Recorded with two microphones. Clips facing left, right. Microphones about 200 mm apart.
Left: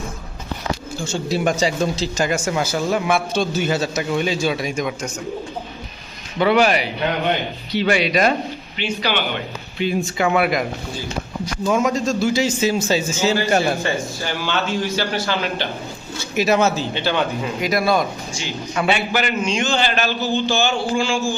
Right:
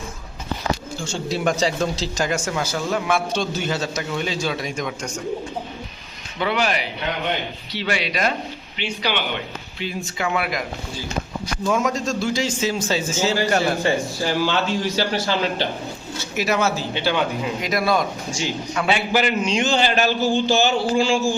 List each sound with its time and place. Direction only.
1.0 s a man's voice: 5° left (ahead or behind)
6.4 s speech: 50° left (ahead or behind)
7.8 s speech: 50° left (ahead or behind)
9.8 s speech: 55° left (ahead or behind)
11.7 s a man's voice: centre (ahead or behind)
14.3 s a man's voice: 35° right (ahead or behind)
16.4 s a man's voice: 20° left (ahead or behind)
16.9 s speech: 10° right (ahead or behind)
17.6 s speech: centre (ahead or behind)
19.1 s a man's voice: 35° right (ahead or behind)